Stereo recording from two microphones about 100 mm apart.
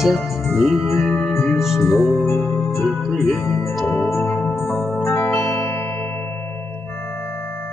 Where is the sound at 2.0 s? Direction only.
25° left (ahead or behind).